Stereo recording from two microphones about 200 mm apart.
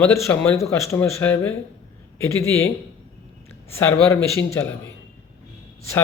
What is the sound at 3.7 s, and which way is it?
Speech, 10° left (ahead or behind).